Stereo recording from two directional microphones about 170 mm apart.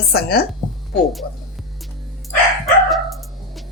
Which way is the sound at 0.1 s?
65° left (ahead or behind).